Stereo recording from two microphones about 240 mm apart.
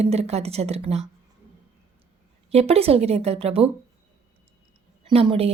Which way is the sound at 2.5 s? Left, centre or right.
Right.